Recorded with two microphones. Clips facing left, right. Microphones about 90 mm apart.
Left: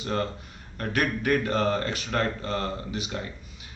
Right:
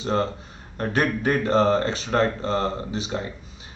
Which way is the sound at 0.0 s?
30° right (ahead or behind).